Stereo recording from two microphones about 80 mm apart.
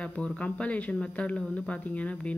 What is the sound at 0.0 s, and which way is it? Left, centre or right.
A woman's voice, centre.